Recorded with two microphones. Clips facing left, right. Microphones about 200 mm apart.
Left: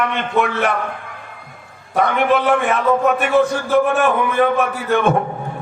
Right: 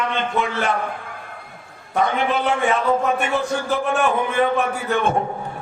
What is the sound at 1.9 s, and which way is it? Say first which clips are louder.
Speech: left 4 dB; 65° left (ahead or behind).